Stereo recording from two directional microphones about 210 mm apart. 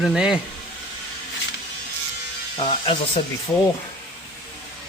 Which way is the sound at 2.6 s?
20° left (ahead or behind).